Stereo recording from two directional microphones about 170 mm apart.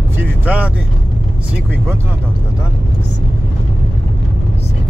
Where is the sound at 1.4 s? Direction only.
10° right (ahead or behind).